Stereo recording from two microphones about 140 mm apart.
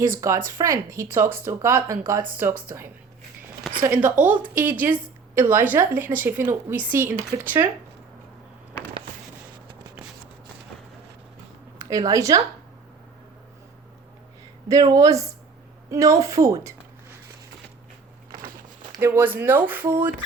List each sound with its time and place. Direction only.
0.2 s a woman's voice: 20° right (ahead or behind)
11.8 s speech: 25° right (ahead or behind)
14.7 s speech: 25° right (ahead or behind)
18.9 s a woman's voice: 15° right (ahead or behind)